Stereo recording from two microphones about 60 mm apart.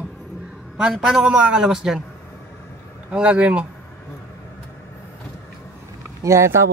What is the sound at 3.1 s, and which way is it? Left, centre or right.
Speech, centre.